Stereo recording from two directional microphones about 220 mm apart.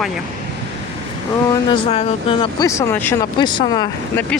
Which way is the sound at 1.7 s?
25° left (ahead or behind).